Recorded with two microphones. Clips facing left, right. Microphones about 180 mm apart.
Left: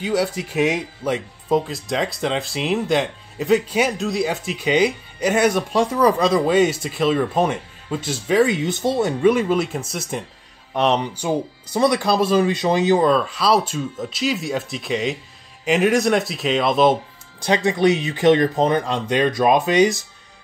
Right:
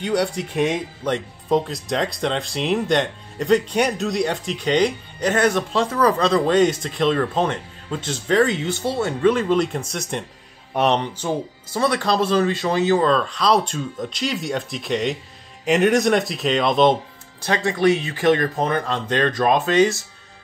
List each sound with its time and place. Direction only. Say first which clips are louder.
0.0 s speech: even; centre (ahead or behind)
11.0 s speech: left 2 dB; 10° left (ahead or behind)
17.5 s speech: left 1 dB; 20° left (ahead or behind)